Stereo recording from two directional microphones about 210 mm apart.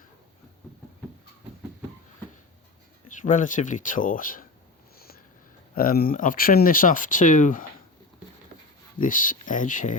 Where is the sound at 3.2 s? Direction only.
40° left (ahead or behind).